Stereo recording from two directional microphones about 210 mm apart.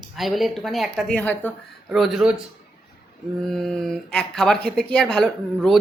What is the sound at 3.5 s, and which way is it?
A woman's voice, centre (ahead or behind).